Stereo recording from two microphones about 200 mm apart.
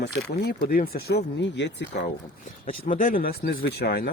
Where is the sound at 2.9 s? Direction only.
45° left (ahead or behind).